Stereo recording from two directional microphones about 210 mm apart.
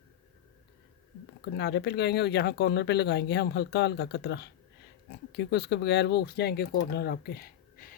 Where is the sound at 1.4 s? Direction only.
50° left (ahead or behind).